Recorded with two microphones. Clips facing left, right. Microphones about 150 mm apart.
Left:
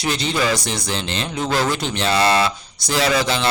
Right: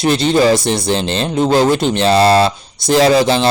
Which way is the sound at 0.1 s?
30° right (ahead or behind).